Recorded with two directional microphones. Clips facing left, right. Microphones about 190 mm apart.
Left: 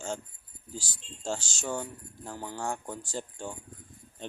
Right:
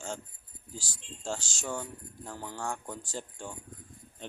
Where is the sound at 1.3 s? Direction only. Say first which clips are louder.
Left 2 dB; 30° left (ahead or behind).